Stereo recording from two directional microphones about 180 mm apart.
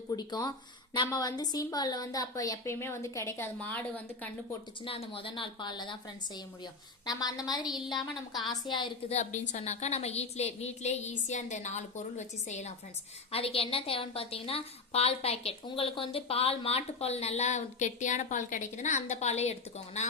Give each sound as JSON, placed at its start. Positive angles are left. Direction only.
{"t": 0.1, "sound": "a woman's voice", "side_deg": 20}
{"t": 4.8, "sound": "a woman's voice", "side_deg": 30}
{"t": 7.7, "sound": "speech", "side_deg": 0}
{"t": 8.4, "sound": "a woman's voice", "side_deg": 25}